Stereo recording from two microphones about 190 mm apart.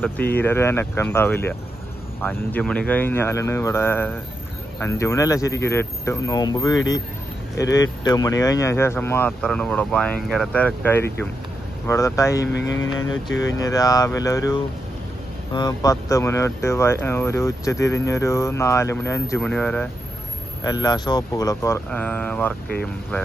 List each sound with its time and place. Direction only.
0.3 s speech: 10° left (ahead or behind)
13.0 s speech: 90° left
13.6 s speech: 20° left (ahead or behind)
20.6 s speech: 20° left (ahead or behind)